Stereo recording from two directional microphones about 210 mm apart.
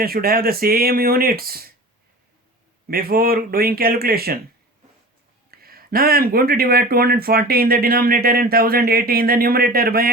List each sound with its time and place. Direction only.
0.0 s speech: 45° right (ahead or behind)
2.8 s speech: 45° right (ahead or behind)
5.5 s speech: 45° right (ahead or behind)